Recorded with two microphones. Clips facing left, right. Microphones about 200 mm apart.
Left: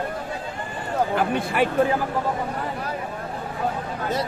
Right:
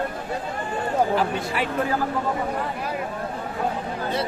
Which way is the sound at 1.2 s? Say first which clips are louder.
Left 3 dB; 55° left (ahead or behind).